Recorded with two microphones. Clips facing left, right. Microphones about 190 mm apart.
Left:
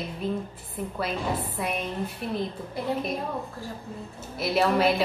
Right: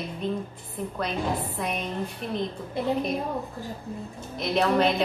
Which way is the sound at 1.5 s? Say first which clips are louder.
Even; 5° left (ahead or behind).